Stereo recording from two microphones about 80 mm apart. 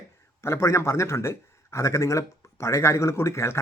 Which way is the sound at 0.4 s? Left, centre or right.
Left.